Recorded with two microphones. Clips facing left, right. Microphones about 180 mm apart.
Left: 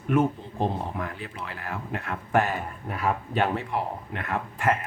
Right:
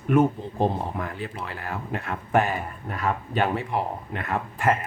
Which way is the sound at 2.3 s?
15° right (ahead or behind).